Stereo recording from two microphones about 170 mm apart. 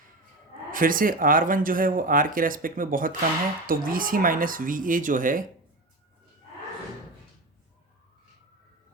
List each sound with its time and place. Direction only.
0.7 s speech: 55° right (ahead or behind)